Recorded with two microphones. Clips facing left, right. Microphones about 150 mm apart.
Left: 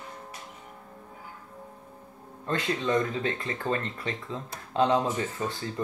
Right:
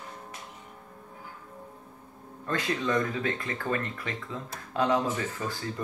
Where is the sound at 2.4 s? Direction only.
25° left (ahead or behind).